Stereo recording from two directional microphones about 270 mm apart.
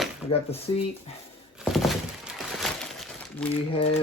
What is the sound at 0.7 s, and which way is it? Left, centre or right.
Speech, centre.